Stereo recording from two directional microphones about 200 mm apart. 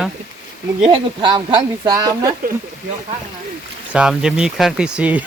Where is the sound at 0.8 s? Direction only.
25° right (ahead or behind).